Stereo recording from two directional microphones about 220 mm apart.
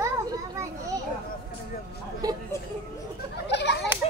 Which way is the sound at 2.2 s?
15° right (ahead or behind).